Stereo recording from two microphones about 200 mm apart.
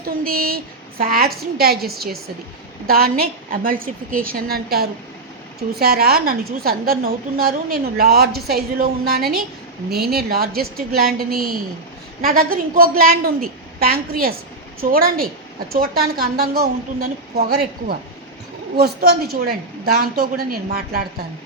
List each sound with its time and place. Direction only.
0.0 s a woman's voice: 45° right (ahead or behind)